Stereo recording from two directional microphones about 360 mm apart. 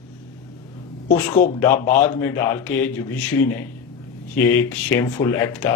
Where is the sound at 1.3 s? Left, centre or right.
Left.